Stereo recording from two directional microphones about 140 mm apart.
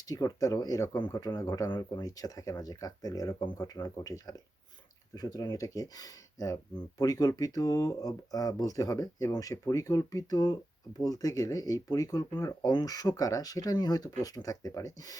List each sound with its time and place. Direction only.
0.1 s speech: 25° left (ahead or behind)